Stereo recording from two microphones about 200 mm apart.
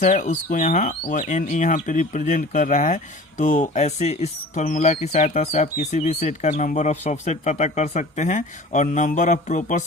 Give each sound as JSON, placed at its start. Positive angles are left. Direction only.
{"t": 0.0, "sound": "speech", "side_deg": 40}